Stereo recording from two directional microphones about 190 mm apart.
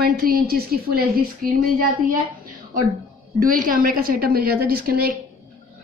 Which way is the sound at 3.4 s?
45° right (ahead or behind).